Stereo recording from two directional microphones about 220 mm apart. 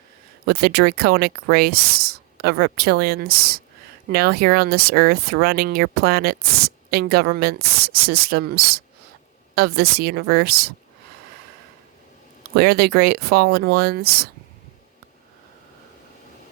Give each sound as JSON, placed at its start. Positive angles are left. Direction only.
{"t": 0.4, "sound": "speech", "side_deg": -45}
{"t": 12.5, "sound": "speech", "side_deg": -45}